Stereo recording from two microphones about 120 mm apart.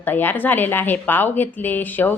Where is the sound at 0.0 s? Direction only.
15° left (ahead or behind).